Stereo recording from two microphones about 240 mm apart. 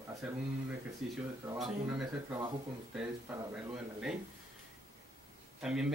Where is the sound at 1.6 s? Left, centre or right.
Centre.